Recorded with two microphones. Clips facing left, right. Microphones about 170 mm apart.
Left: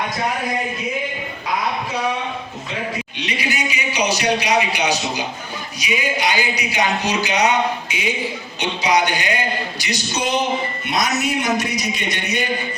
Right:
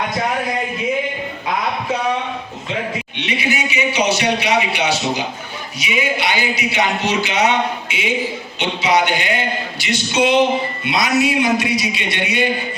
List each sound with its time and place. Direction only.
3.2 s a man's voice: 40° left (ahead or behind)